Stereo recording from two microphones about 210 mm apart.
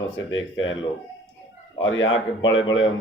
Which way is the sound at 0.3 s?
65° left (ahead or behind).